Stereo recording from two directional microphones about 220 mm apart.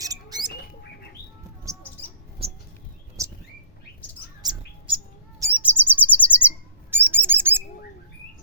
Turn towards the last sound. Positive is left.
turn(degrees=-10)  # may be behind; listen again after turning